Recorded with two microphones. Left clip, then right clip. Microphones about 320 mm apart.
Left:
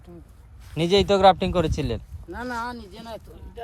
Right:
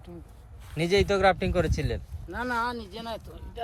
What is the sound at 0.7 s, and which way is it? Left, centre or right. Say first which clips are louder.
Speech: left 4 dB; left.